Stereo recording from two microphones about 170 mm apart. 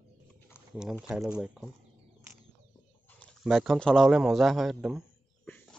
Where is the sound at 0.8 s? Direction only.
5° right (ahead or behind).